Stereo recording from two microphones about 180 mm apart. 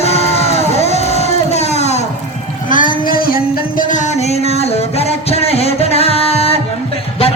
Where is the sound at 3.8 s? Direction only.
40° left (ahead or behind).